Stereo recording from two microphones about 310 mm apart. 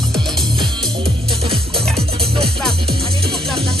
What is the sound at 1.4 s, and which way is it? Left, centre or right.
Music, centre.